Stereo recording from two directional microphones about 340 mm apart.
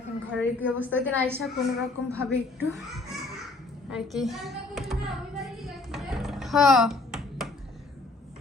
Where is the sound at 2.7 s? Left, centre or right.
Centre.